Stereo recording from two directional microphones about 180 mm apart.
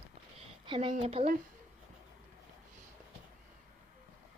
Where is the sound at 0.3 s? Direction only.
30° right (ahead or behind).